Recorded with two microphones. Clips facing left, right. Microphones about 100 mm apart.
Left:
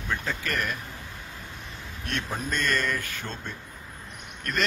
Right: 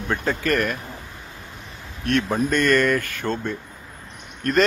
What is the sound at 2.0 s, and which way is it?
Speech, 60° right (ahead or behind).